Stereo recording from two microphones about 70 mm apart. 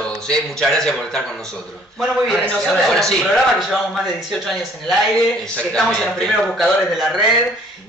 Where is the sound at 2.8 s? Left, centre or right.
Centre.